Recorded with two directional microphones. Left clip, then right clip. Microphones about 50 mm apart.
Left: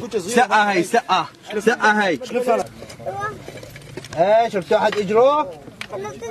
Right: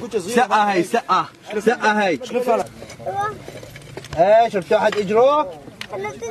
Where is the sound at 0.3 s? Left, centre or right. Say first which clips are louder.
Left 1 dB; left.